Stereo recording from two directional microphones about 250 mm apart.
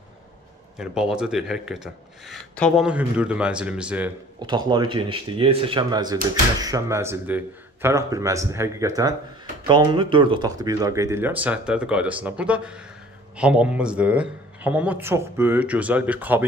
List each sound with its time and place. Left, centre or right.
0.7 s speech: centre
4.4 s speech: centre